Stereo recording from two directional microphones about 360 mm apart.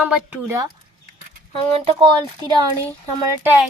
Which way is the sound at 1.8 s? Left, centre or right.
Centre.